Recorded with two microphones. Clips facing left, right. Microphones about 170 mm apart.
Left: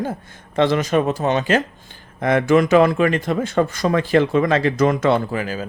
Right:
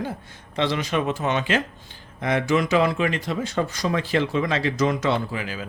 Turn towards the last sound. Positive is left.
turn(degrees=45)  # may be behind; listen again after turning